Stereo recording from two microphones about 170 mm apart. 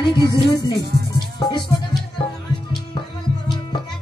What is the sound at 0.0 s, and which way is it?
Speech, 25° left (ahead or behind).